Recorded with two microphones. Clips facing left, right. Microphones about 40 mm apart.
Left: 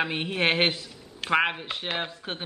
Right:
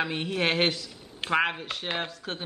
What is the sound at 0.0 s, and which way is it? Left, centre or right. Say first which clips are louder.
Speech: left 2 dB; left.